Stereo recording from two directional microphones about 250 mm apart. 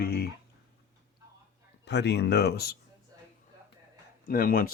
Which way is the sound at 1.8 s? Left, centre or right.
Left.